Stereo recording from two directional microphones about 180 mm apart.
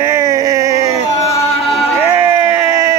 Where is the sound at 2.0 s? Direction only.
15° right (ahead or behind).